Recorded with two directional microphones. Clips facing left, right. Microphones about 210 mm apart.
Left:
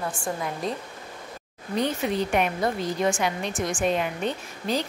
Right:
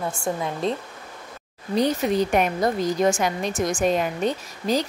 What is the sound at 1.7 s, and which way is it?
A woman's voice, 40° right (ahead or behind).